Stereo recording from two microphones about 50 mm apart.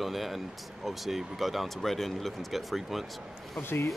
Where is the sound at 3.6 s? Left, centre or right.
Left.